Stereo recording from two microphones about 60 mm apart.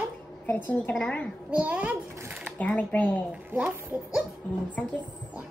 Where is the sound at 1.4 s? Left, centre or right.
Right.